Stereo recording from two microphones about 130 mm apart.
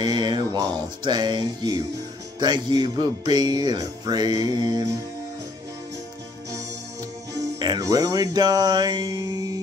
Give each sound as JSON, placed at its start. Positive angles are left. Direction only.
{"t": 0.0, "sound": "music", "side_deg": -35}
{"t": 7.5, "sound": "music", "side_deg": -35}